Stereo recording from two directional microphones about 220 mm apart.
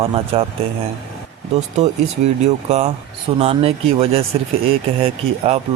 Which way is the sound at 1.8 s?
30° right (ahead or behind).